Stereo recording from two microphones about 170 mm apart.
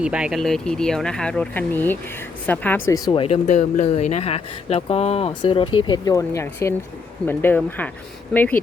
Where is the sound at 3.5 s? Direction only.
45° left (ahead or behind).